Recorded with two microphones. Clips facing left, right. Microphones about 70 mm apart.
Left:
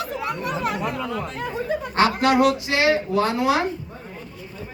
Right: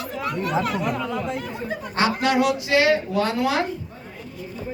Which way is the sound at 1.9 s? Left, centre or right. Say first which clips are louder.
Left 2 dB; left.